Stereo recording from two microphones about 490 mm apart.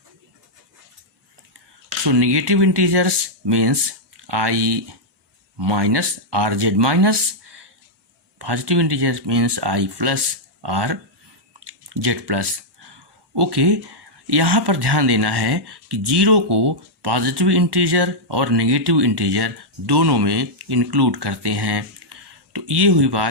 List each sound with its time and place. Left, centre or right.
2.0 s speech: right
11.6 s a sound: right
12.9 s speech: right